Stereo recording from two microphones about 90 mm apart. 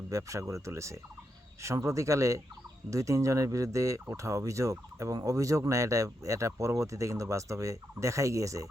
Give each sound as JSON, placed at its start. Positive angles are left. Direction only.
{"t": 0.1, "sound": "speech", "side_deg": -35}